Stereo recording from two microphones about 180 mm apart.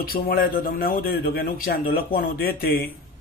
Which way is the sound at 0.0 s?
55° left (ahead or behind).